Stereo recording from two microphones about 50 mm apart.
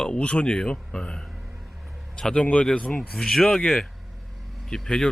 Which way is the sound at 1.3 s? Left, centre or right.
Centre.